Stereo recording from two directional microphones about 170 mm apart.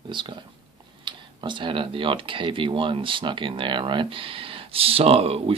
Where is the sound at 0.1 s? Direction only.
30° right (ahead or behind).